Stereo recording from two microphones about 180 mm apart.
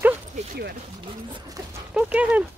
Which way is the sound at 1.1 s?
25° right (ahead or behind).